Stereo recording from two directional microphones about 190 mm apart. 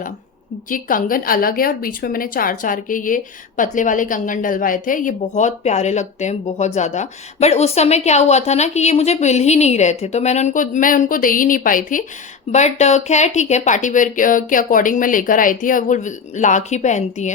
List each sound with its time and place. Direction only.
0.7 s a woman's voice: 45° left (ahead or behind)